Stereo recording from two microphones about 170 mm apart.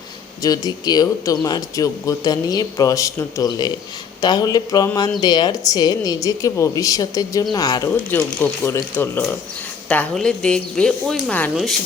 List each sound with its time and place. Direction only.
0.4 s speech: 20° left (ahead or behind); by 11.8 s centre (ahead or behind)